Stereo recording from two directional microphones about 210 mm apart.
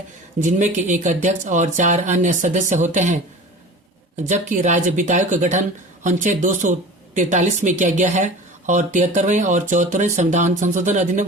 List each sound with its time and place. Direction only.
0.3 s speech: 35° right (ahead or behind)
4.2 s speech: 35° right (ahead or behind)